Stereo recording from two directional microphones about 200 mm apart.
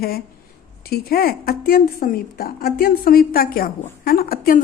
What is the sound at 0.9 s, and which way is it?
A woman's voice, 50° left (ahead or behind).